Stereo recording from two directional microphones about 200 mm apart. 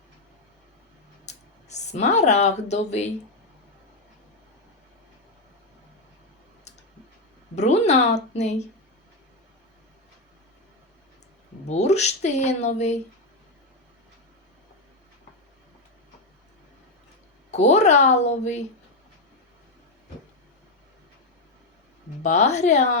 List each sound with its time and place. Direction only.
1.2 s speech: 35° left (ahead or behind)
7.5 s speech: 35° left (ahead or behind)
11.7 s speech: 35° left (ahead or behind)
17.5 s speech: 35° left (ahead or behind)
22.2 s speech: 35° left (ahead or behind)